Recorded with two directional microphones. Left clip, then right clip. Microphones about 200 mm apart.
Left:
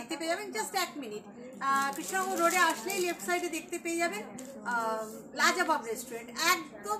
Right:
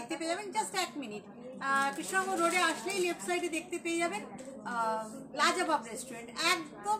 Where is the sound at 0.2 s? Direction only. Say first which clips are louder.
Left 1 dB; 15° right (ahead or behind).